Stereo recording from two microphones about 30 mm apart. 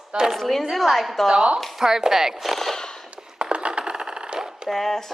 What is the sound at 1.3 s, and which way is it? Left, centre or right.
Speech, right.